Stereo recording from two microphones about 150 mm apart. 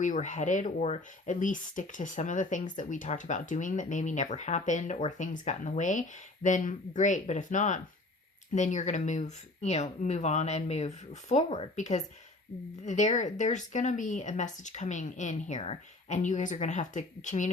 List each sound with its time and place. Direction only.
0.0 s speech: 55° left (ahead or behind)